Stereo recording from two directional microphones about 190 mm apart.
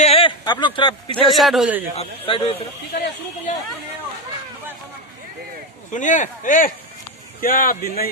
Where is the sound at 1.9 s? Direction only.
30° left (ahead or behind).